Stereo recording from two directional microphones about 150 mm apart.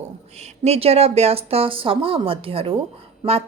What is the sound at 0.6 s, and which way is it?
A woman's voice, 45° right (ahead or behind).